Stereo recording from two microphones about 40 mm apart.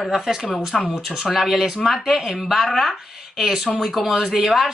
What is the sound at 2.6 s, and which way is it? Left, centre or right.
Speech, centre.